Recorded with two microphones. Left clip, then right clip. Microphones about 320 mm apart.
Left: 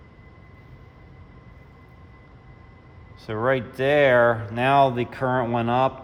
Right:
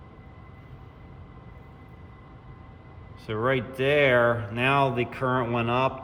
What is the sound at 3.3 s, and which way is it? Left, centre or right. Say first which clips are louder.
Speech: left 3 dB; left.